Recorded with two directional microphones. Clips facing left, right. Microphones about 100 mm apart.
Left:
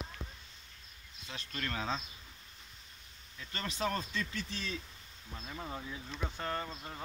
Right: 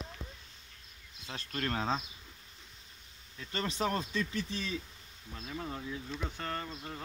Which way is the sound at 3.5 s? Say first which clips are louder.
Right 3 dB; 25° right (ahead or behind).